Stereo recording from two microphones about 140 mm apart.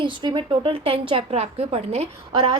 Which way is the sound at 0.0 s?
35° right (ahead or behind).